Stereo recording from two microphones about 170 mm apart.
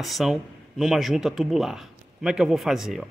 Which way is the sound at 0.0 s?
Centre (ahead or behind).